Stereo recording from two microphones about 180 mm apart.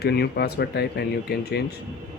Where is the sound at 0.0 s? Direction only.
65° left (ahead or behind).